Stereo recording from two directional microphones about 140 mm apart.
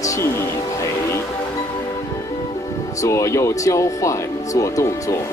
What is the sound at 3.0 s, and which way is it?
Speech, 20° left (ahead or behind).